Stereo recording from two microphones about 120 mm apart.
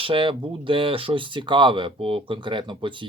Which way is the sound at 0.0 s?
45° right (ahead or behind).